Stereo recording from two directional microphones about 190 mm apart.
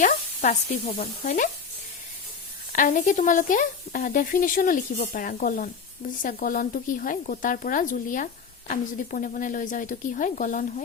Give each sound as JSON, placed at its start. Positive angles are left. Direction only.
{"t": 0.0, "sound": "speech", "side_deg": 40}
{"t": 2.7, "sound": "speech", "side_deg": 40}